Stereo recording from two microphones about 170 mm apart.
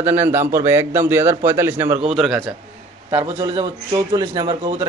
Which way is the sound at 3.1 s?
35° right (ahead or behind).